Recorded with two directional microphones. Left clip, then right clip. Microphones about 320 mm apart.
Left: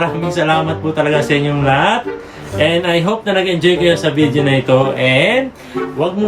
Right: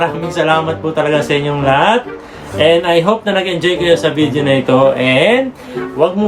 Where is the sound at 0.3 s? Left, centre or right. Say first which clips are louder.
Right 2 dB; centre.